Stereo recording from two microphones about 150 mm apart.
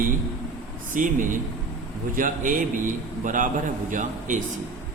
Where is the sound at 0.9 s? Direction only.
60° right (ahead or behind).